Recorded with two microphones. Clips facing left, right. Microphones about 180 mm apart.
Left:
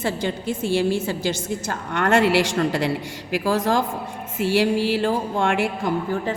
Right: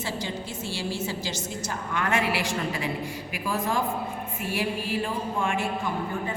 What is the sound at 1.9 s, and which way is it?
A woman's voice, 75° left (ahead or behind).